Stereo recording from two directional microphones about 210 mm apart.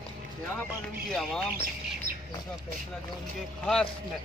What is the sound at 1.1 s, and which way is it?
Speech, centre (ahead or behind).